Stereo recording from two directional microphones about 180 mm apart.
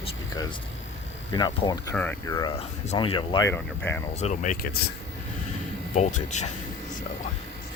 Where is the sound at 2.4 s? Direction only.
30° left (ahead or behind).